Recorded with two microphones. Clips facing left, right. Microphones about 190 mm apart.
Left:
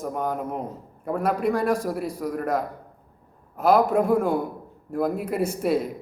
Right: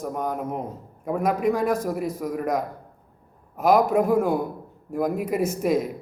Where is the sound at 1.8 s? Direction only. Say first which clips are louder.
Right 1 dB; 5° left (ahead or behind).